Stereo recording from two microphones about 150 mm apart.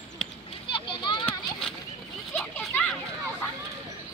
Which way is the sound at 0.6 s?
35° left (ahead or behind).